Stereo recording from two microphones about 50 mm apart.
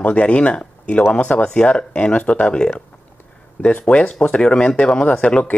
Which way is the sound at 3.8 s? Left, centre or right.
Left.